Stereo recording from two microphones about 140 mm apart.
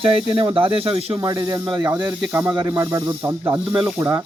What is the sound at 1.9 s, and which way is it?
Speech, 10° right (ahead or behind).